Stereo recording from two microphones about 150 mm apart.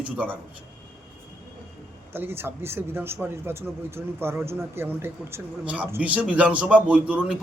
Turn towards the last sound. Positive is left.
turn(degrees=-5)  # may be behind; listen again after turning